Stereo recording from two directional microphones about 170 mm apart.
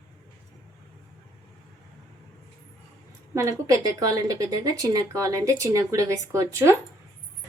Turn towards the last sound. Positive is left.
turn(degrees=-15)  # may be behind; listen again after turning